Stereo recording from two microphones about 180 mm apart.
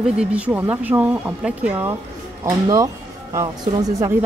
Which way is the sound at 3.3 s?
20° right (ahead or behind).